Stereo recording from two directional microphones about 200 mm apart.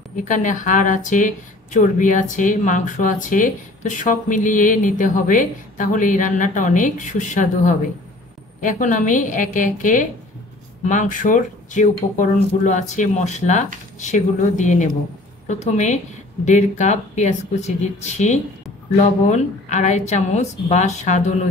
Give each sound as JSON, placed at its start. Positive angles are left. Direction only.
{"t": 0.2, "sound": "speech", "side_deg": 40}